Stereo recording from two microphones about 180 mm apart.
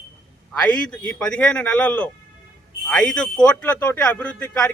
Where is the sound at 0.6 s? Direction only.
10° left (ahead or behind).